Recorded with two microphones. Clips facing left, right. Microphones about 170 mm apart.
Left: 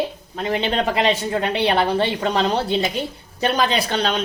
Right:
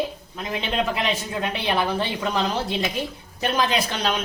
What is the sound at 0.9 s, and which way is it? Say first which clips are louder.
Speech: left 6 dB; 75° left (ahead or behind).